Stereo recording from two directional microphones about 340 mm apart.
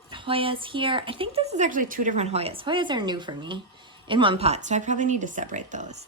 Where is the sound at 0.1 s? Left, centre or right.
Centre.